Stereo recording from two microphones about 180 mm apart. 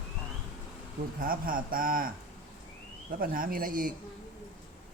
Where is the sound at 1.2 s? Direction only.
50° right (ahead or behind).